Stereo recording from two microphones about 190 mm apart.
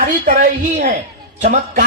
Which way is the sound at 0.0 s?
40° right (ahead or behind).